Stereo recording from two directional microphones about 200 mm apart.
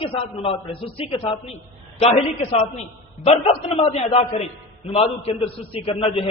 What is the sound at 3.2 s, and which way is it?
A man's voice, 30° left (ahead or behind).